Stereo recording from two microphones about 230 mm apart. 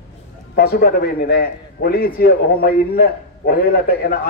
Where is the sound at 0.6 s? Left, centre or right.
Left.